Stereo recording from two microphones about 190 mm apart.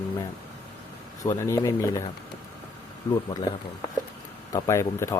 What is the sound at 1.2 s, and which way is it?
Speech, 15° left (ahead or behind).